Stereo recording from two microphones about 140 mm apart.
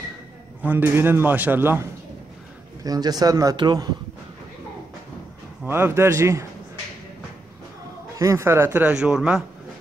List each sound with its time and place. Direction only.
0.6 s a man's voice: 10° right (ahead or behind)
2.8 s a man's voice: 25° right (ahead or behind)
5.7 s a man's voice: 15° right (ahead or behind)
8.2 s a man's voice: 20° right (ahead or behind)